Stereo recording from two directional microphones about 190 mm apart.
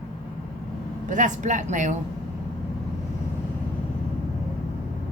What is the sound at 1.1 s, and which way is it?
Speech, 40° right (ahead or behind).